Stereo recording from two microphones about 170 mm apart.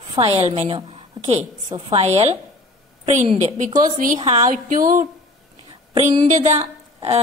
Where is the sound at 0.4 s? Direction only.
35° right (ahead or behind).